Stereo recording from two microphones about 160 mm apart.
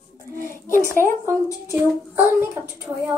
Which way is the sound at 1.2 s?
15° right (ahead or behind).